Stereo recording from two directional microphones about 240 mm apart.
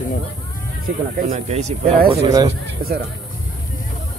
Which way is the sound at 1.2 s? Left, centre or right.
Right.